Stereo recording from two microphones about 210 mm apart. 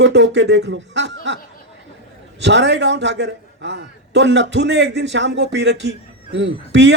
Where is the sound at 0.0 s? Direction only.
55° right (ahead or behind).